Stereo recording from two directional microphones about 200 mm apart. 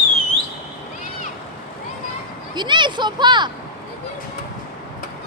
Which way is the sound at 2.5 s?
20° right (ahead or behind).